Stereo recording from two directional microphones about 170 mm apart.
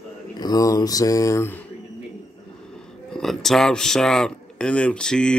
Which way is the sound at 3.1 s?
Centre (ahead or behind).